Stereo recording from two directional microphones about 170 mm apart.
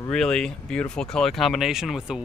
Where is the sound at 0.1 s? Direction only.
5° left (ahead or behind).